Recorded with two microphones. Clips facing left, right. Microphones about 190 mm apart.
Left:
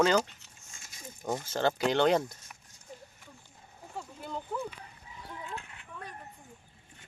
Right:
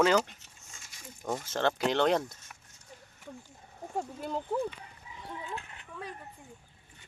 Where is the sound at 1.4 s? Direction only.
Centre (ahead or behind).